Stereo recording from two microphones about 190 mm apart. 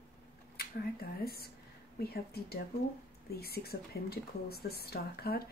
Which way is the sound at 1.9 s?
55° left (ahead or behind).